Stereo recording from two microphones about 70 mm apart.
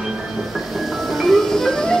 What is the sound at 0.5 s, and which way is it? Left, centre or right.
Music, centre.